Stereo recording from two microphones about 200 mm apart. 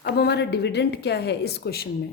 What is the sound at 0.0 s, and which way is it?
A woman's voice, 55° left (ahead or behind).